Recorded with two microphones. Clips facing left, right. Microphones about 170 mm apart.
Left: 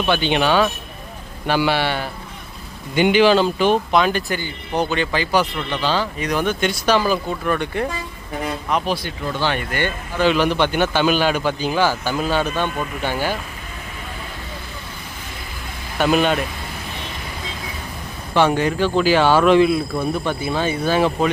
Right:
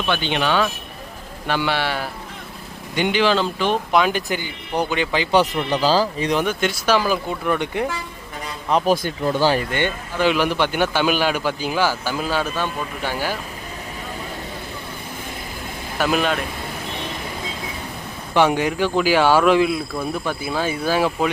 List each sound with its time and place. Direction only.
0.4 s a man's voice: 35° left (ahead or behind)
1.5 s speech: 5° left (ahead or behind)
3.9 s a man's voice: 15° right (ahead or behind)
5.3 s speech: 30° right (ahead or behind)
6.3 s a man's voice: 10° right (ahead or behind)
8.9 s speech: 40° right (ahead or behind); by 9.9 s 25° right (ahead or behind)
10.2 s a man's voice: 10° right (ahead or behind)
16.0 s speech: centre (ahead or behind)
18.3 s a man's voice: 15° right (ahead or behind)